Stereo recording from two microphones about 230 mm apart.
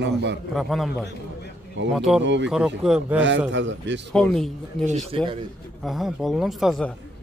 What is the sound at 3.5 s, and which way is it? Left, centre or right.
Speech, right.